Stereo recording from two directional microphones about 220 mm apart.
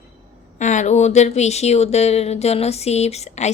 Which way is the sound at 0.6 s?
35° left (ahead or behind).